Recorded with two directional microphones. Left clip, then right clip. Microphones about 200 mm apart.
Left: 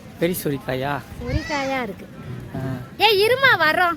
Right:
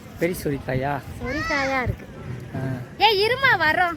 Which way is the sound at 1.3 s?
40° left (ahead or behind).